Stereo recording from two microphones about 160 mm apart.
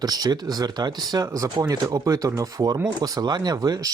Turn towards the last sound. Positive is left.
turn(degrees=-25)  # may be behind; listen again after turning